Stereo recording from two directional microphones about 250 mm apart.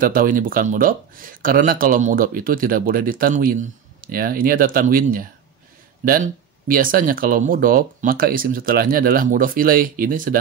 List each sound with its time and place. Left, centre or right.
0.0 s speech: right